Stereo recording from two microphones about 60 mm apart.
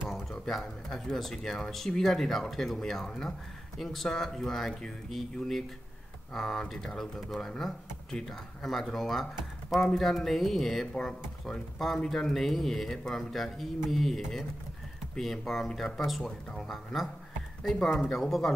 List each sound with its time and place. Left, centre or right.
0.5 s speech: centre